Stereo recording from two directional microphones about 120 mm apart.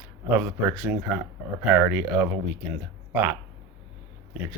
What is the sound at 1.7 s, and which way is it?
Speech, 10° right (ahead or behind).